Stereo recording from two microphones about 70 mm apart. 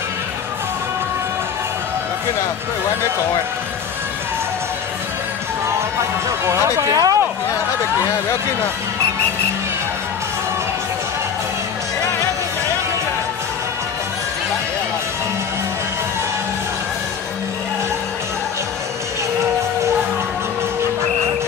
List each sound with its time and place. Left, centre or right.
6.4 s speech: right
6.9 s speech: right